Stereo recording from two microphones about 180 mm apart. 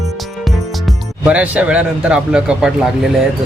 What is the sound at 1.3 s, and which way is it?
Speech, 5° right (ahead or behind).